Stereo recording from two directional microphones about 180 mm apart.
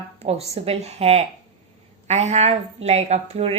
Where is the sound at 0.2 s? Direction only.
35° right (ahead or behind).